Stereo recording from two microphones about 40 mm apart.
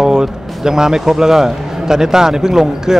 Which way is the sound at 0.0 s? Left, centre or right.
Centre.